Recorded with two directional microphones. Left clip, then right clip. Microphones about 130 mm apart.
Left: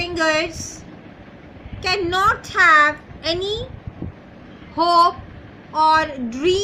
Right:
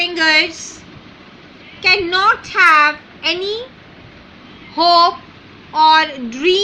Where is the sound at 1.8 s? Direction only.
15° right (ahead or behind).